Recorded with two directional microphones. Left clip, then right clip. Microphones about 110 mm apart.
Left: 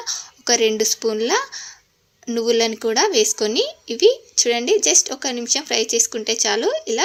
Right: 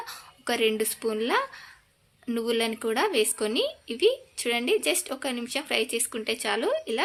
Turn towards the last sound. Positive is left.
turn(degrees=30)  # may be behind; listen again after turning